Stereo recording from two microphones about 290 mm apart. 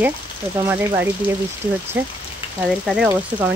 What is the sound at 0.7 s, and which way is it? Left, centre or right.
Speech, centre.